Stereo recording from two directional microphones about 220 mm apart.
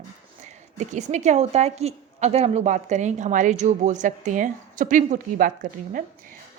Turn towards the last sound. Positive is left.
turn(degrees=-40)  # may be behind; listen again after turning